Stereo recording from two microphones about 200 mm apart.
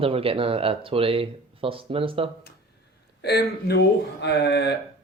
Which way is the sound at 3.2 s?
55° left (ahead or behind).